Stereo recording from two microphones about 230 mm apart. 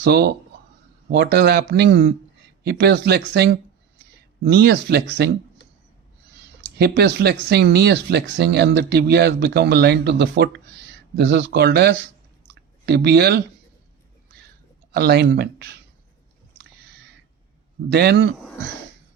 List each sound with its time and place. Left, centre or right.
0.0 s speech: right
6.7 s speech: right
12.5 s a sound: right
14.9 s speech: right
17.8 s speech: right